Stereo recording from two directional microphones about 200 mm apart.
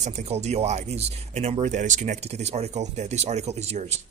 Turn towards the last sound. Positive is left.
turn(degrees=-35)  # may be behind; listen again after turning